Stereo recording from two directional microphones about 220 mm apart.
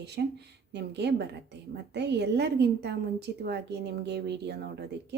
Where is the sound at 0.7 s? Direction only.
50° right (ahead or behind).